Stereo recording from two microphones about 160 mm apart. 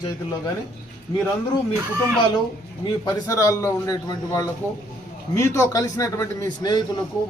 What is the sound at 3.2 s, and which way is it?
A man's voice, 20° left (ahead or behind).